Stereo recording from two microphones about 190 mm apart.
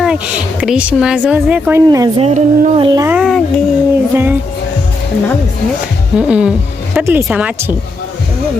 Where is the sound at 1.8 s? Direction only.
20° right (ahead or behind).